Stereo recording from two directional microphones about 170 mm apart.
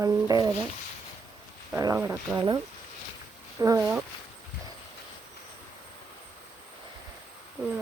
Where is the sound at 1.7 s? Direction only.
15° right (ahead or behind).